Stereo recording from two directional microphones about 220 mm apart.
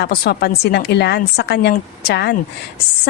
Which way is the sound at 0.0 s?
45° left (ahead or behind).